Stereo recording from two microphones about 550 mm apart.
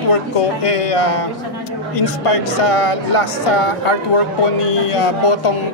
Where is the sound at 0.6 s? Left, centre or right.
Left.